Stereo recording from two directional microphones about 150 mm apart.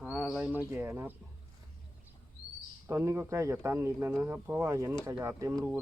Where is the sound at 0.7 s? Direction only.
15° right (ahead or behind).